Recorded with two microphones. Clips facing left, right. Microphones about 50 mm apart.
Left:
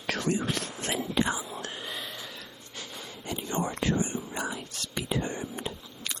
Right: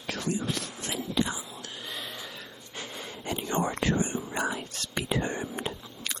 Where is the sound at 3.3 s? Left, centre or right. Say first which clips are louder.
Right 2 dB; right.